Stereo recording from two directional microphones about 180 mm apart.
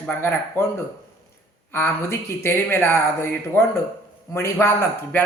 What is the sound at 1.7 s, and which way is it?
A woman's voice, 15° left (ahead or behind).